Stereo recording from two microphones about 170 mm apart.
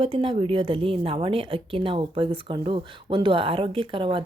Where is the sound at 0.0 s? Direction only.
30° right (ahead or behind).